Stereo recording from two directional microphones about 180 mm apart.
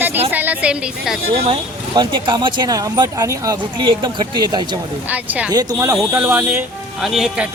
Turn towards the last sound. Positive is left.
turn(degrees=-5)  # may be behind; listen again after turning